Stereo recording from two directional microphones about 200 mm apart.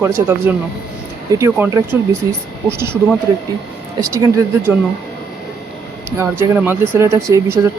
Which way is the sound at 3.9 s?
15° right (ahead or behind).